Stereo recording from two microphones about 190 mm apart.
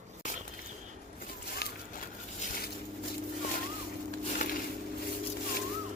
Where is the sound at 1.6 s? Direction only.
55° left (ahead or behind).